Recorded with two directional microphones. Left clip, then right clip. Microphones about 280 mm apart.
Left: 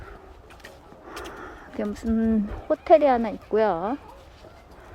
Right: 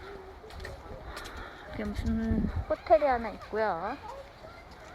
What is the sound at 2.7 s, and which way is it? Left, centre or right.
Speech, left.